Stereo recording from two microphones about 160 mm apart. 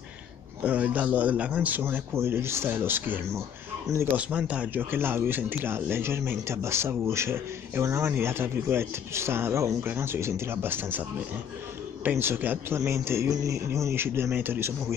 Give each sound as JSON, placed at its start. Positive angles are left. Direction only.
{"t": 0.6, "sound": "speech", "side_deg": -10}